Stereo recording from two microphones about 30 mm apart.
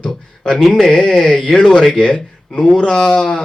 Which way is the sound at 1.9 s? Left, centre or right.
Left.